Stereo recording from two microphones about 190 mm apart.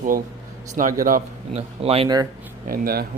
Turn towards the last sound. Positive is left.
turn(degrees=-50)  # may be behind; listen again after turning